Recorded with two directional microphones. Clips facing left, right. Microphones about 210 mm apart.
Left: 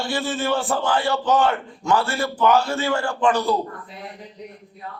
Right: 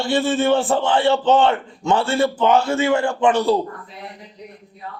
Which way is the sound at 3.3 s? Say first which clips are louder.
Right 3 dB; 30° right (ahead or behind).